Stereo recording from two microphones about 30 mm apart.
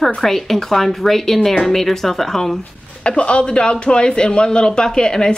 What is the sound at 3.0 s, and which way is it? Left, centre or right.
A man's voice, left.